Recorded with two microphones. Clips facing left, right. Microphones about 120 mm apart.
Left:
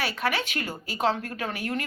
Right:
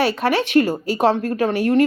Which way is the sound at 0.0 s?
30° right (ahead or behind).